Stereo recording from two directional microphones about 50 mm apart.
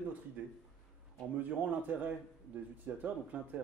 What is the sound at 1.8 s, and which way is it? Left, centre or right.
Speech, right.